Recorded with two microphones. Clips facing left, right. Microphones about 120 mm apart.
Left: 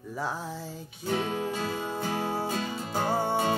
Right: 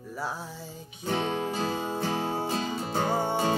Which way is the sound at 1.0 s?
30° right (ahead or behind).